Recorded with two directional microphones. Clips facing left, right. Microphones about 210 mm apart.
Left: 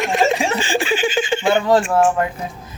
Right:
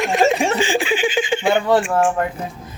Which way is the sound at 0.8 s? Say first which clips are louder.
Even; 15° right (ahead or behind).